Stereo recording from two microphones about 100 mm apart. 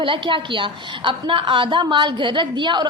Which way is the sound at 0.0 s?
55° right (ahead or behind).